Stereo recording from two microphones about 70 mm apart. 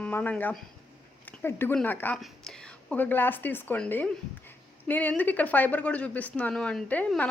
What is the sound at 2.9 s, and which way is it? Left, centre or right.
Speech, left.